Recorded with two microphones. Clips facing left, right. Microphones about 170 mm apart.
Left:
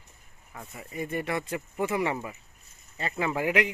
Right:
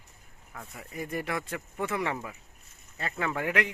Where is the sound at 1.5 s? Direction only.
15° left (ahead or behind).